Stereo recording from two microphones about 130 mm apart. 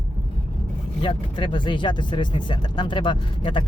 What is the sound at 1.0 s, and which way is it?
Speech, 40° left (ahead or behind).